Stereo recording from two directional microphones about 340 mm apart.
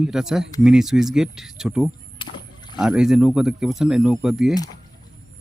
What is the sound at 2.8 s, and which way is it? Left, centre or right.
Speech, centre.